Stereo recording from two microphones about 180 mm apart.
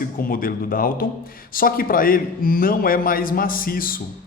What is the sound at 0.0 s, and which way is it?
Speech, 50° left (ahead or behind).